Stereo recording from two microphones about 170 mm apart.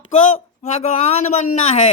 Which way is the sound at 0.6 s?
40° left (ahead or behind).